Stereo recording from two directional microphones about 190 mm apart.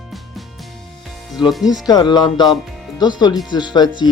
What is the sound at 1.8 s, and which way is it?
Speech, 20° left (ahead or behind).